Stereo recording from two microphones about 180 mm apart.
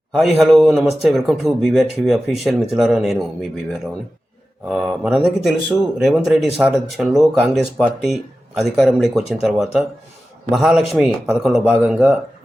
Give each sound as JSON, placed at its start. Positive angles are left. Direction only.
{"t": 0.3, "sound": "speech", "side_deg": 0}